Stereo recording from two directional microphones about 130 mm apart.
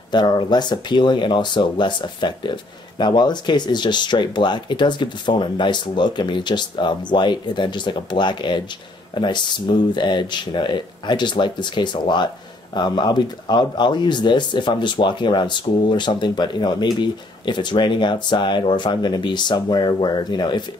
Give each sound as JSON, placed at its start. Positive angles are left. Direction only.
{"t": 0.1, "sound": "speech", "side_deg": 35}